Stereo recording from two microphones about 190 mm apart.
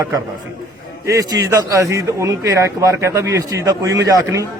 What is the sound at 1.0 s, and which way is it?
A man's voice, 15° right (ahead or behind).